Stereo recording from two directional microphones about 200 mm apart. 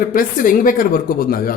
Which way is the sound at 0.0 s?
45° left (ahead or behind).